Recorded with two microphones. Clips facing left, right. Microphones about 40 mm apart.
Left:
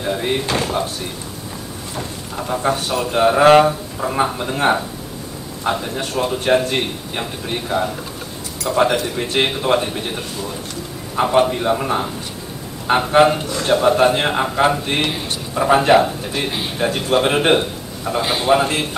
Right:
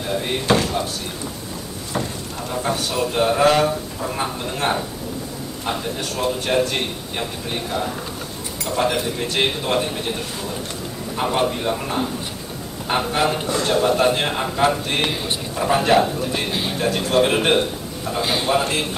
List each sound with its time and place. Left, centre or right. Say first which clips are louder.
0.0 s slam: left 3 dB; centre
0.6 s speech: left 2 dB; centre
2.3 s a man's voice: left 5 dB; centre
11.3 s a man's voice: left 6 dB; centre